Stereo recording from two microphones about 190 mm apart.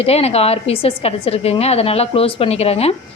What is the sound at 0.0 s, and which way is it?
Speech, 30° left (ahead or behind).